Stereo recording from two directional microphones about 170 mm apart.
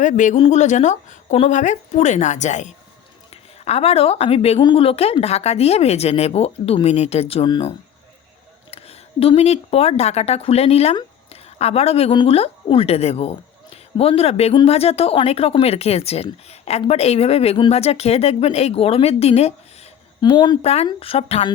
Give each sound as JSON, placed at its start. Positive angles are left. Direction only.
{"t": 0.0, "sound": "a woman's voice", "side_deg": 50}
{"t": 8.7, "sound": "a woman's voice", "side_deg": 35}
{"t": 20.6, "sound": "a woman's voice", "side_deg": 40}